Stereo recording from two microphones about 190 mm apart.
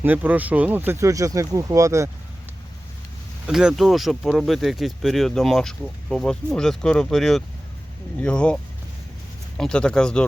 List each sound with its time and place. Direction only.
0.0 s speech: 10° right (ahead or behind)
3.4 s speech: 5° right (ahead or behind)
9.6 s speech: 5° left (ahead or behind)